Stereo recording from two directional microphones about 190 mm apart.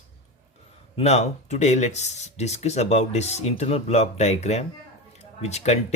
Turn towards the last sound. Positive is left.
turn(degrees=35)  # may be behind; listen again after turning